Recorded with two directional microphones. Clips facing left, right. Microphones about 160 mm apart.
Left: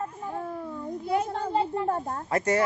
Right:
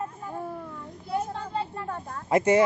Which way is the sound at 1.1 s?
90° left.